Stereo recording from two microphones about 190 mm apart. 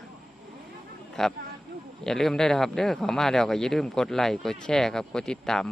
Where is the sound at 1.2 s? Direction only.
5° left (ahead or behind).